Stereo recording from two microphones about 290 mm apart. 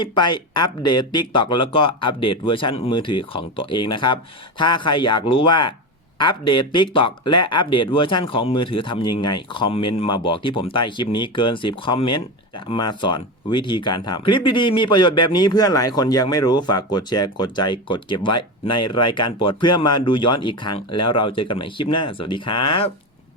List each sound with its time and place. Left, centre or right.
0.0 s speech: centre